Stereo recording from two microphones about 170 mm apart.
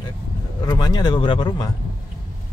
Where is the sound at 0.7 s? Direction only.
25° left (ahead or behind).